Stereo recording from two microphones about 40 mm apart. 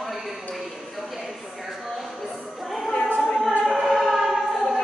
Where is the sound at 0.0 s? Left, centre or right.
Centre.